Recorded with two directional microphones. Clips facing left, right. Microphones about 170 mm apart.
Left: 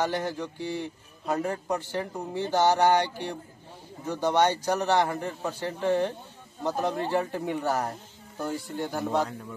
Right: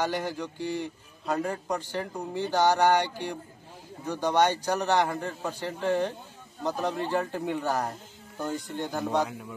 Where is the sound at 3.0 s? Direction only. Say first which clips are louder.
Left 1 dB; 10° right (ahead or behind).